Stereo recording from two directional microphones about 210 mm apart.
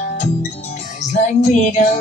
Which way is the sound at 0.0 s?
35° left (ahead or behind).